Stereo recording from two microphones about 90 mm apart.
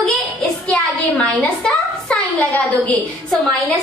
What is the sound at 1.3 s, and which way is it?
A woman's voice, 10° left (ahead or behind).